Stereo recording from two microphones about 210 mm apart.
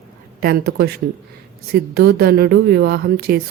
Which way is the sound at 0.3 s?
45° right (ahead or behind).